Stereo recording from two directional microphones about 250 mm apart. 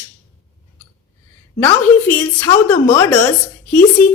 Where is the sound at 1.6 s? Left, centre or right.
Centre.